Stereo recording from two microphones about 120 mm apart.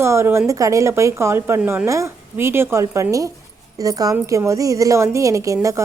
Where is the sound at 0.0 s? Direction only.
25° right (ahead or behind).